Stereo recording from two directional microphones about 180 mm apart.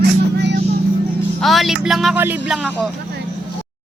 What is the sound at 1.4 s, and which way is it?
Speech, centre (ahead or behind).